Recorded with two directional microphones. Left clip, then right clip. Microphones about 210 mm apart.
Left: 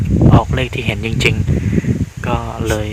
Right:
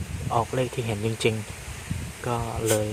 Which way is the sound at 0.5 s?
25° left (ahead or behind).